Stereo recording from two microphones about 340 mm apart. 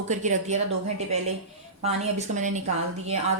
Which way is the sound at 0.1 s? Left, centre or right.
Right.